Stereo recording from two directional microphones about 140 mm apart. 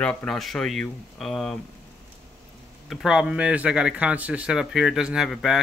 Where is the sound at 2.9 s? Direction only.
Centre (ahead or behind).